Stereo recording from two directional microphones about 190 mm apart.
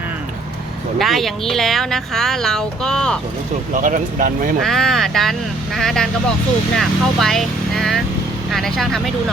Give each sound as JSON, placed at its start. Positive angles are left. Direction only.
{"t": 0.9, "sound": "speech", "side_deg": 0}
{"t": 3.8, "sound": "speech", "side_deg": -45}
{"t": 4.6, "sound": "speech", "side_deg": 0}